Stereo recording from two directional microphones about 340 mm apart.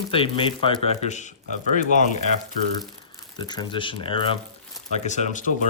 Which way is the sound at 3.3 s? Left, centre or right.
Centre.